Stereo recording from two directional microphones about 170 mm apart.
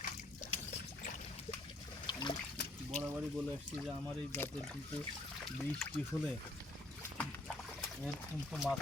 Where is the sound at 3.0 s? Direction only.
10° right (ahead or behind).